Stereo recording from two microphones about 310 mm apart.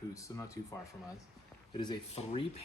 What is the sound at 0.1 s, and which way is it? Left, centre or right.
Speech, centre.